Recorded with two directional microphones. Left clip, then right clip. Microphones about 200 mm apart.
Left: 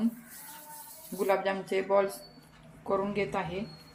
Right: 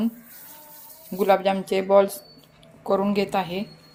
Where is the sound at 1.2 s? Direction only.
45° right (ahead or behind).